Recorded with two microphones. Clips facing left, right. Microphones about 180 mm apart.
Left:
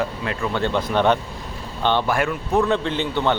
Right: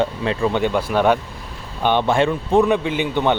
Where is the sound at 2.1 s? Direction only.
25° right (ahead or behind).